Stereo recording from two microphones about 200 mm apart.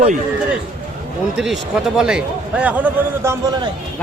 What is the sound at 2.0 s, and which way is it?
A man's voice, 5° right (ahead or behind).